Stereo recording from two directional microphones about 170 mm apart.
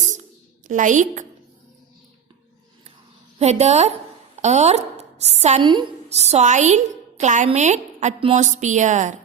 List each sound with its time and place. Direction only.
0.7 s a woman's voice: 50° right (ahead or behind)
3.3 s a woman's voice: 40° right (ahead or behind)